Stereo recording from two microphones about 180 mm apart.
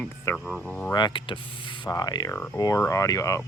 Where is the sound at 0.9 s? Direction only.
25° left (ahead or behind).